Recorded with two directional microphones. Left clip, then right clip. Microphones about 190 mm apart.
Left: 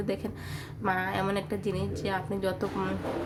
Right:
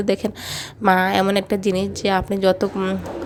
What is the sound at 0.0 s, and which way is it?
A woman's voice, 45° right (ahead or behind).